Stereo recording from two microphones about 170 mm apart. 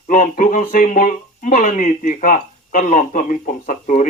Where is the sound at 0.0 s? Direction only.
50° left (ahead or behind).